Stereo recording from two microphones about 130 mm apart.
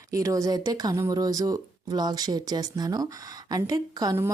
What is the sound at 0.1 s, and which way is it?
Speech, 25° right (ahead or behind).